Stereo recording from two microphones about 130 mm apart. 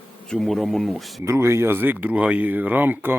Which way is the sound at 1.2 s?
20° right (ahead or behind).